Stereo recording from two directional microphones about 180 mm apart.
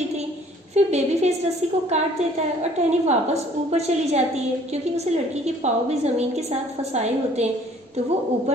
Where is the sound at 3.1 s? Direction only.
35° right (ahead or behind).